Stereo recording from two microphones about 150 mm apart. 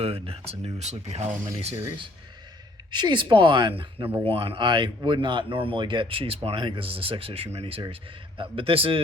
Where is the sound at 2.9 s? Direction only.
30° right (ahead or behind).